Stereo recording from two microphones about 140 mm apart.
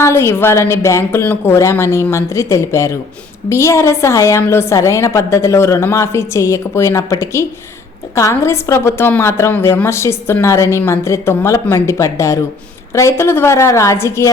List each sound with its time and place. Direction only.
0.0 s a woman's voice: 20° left (ahead or behind)